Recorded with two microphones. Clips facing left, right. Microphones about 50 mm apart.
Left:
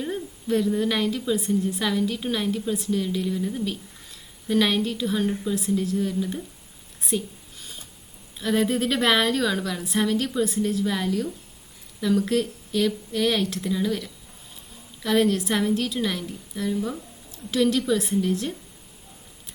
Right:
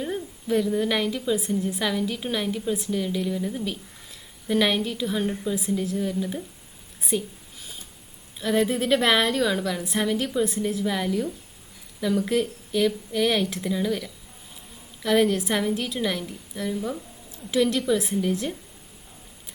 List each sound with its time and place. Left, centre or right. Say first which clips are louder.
0.0 s a woman's voice: even; centre
7.6 s a sound: even; centre
8.4 s a woman's voice: even; centre